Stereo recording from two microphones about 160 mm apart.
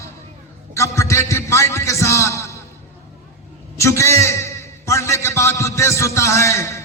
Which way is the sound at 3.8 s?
20° left (ahead or behind).